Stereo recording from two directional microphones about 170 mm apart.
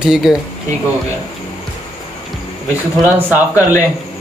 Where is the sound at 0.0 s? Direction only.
Centre (ahead or behind).